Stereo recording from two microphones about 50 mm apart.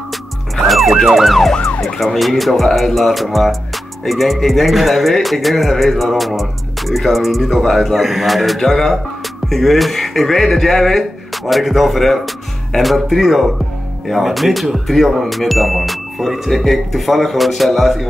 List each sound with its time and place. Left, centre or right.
0.7 s emergency vehicle: centre
2.1 s speech: centre